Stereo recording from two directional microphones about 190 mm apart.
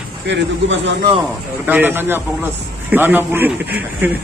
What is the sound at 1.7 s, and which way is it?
Speech, 10° right (ahead or behind).